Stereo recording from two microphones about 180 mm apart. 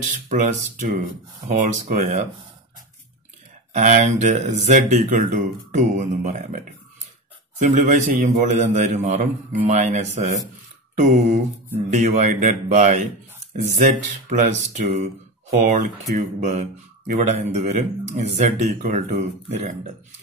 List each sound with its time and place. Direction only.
0.3 s speech: 40° right (ahead or behind)
3.7 s speech: 40° right (ahead or behind)